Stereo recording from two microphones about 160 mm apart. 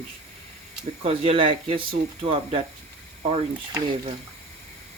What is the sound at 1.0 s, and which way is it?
Speech, 35° right (ahead or behind).